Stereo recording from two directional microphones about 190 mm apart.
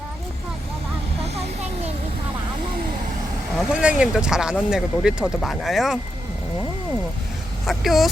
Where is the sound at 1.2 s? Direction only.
35° right (ahead or behind).